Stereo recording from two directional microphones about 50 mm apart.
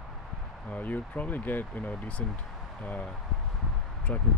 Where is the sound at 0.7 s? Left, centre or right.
Left.